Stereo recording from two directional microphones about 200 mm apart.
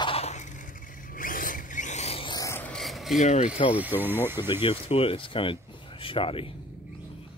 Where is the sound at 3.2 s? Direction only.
35° left (ahead or behind).